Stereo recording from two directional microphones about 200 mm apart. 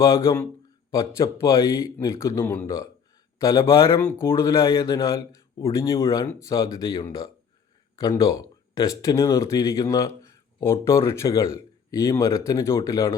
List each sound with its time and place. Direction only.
0.0 s speech: 15° left (ahead or behind)